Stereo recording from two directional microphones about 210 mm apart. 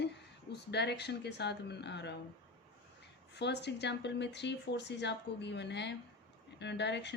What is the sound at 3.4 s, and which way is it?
Speech, 55° left (ahead or behind).